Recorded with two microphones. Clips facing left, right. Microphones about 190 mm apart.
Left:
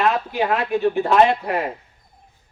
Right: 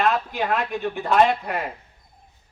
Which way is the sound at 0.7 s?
40° left (ahead or behind).